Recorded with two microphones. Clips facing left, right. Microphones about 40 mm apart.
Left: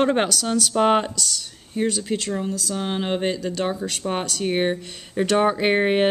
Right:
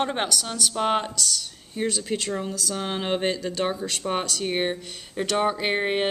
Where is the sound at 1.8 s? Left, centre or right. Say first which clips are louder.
Left 3 dB; centre.